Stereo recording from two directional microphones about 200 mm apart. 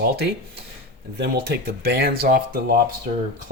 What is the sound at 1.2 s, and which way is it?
Speech, 55° right (ahead or behind).